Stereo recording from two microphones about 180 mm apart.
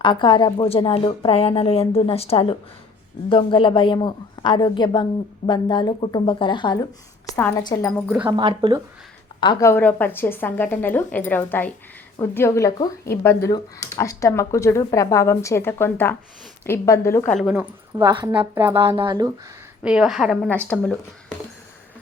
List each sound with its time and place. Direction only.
0.0 s a woman's voice: 25° left (ahead or behind)
7.3 s a woman's voice: 10° left (ahead or behind)
8.3 s speech: 25° right (ahead or behind)
9.4 s speech: 20° left (ahead or behind)
17.4 s speech: 10° right (ahead or behind)
18.0 s speech: 25° right (ahead or behind)
18.5 s speech: 10° right (ahead or behind)
18.8 s speech: 25° right (ahead or behind)
19.8 s speech: 5° right (ahead or behind)